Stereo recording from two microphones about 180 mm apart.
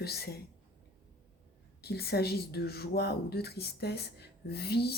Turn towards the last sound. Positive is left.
turn(degrees=65)  # may be behind; listen again after turning